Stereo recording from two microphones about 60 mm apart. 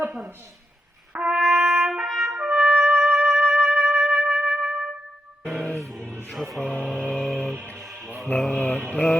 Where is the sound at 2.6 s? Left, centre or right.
Right.